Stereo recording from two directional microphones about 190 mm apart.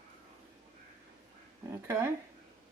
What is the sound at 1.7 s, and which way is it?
Speech, 15° right (ahead or behind).